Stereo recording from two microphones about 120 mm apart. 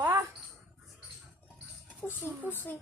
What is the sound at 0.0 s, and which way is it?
Dog, 25° right (ahead or behind).